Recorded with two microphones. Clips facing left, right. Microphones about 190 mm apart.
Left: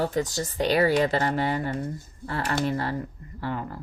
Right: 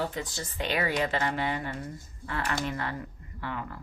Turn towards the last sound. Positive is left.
turn(degrees=35)  # may be behind; listen again after turning